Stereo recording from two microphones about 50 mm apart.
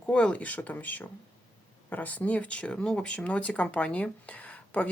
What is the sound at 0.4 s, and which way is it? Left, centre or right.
Speech, left.